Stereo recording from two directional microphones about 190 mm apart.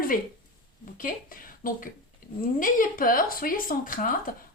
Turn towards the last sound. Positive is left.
turn(degrees=45)  # may be behind; listen again after turning